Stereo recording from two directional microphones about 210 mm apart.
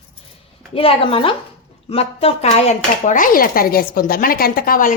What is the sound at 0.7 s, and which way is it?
A woman's voice, 25° left (ahead or behind).